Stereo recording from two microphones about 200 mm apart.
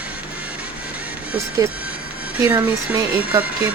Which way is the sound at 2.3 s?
10° right (ahead or behind).